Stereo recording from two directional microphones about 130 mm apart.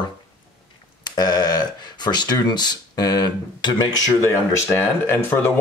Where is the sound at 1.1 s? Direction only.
30° left (ahead or behind).